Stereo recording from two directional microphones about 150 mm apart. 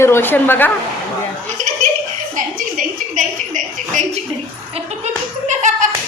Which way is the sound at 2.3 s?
60° right (ahead or behind).